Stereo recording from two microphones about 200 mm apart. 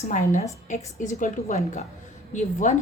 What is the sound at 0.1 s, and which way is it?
A woman's voice, 40° left (ahead or behind).